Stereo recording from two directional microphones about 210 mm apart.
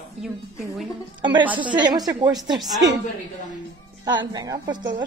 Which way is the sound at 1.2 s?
20° right (ahead or behind).